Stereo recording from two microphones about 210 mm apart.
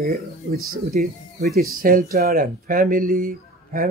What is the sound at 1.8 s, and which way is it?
Speech, 45° right (ahead or behind).